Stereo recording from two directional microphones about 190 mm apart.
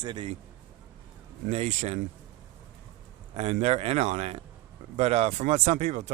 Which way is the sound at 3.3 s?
35° right (ahead or behind).